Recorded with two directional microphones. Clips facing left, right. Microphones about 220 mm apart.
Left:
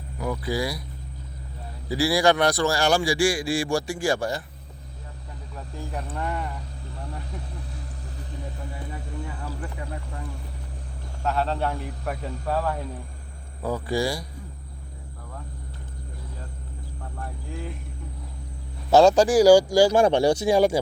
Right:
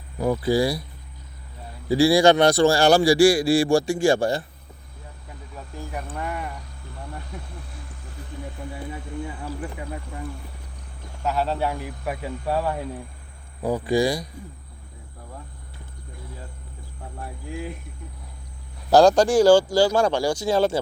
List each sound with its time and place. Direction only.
0.2 s speech: 30° right (ahead or behind)
1.9 s a man's voice: 25° right (ahead or behind)
5.9 s a man's voice: 10° right (ahead or behind)
7.3 s a sound: 35° left (ahead or behind)
11.2 s a man's voice: 5° right (ahead or behind)
18.9 s speech: centre (ahead or behind); by 20.3 s 25° left (ahead or behind)
20.4 s speech: 15° left (ahead or behind)